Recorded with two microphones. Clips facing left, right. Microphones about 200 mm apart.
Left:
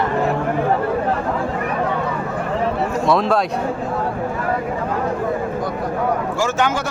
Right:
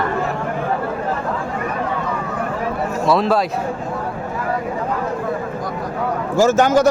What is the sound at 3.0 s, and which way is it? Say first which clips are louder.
Speech: right 1 dB; centre (ahead or behind).